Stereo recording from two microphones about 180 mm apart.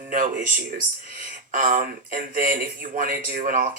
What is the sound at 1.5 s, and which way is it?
Speech, 50° right (ahead or behind).